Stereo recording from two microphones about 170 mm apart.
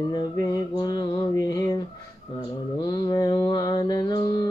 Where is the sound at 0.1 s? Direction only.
25° left (ahead or behind).